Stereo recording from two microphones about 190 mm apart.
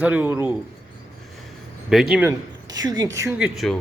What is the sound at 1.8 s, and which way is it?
Speech, 5° right (ahead or behind).